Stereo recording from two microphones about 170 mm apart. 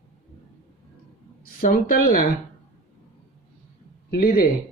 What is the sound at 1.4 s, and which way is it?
Speech, 55° left (ahead or behind).